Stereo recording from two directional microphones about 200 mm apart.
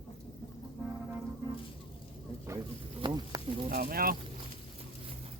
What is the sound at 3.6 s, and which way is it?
Speech, 50° right (ahead or behind).